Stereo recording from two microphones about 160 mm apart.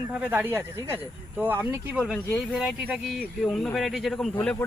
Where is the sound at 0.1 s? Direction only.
10° right (ahead or behind).